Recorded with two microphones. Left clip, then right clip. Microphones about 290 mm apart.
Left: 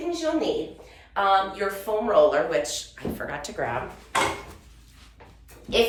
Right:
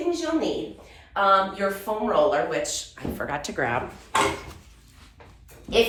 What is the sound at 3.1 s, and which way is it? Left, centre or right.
Speech, right.